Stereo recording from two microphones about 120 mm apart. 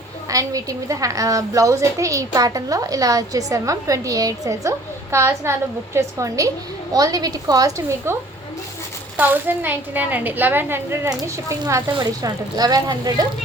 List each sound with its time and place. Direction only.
0.3 s a woman's voice: 30° right (ahead or behind)
9.1 s speech: 15° right (ahead or behind)
11.1 s speech: 30° right (ahead or behind)